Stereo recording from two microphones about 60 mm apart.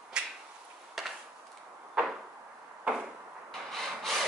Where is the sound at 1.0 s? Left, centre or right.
Centre.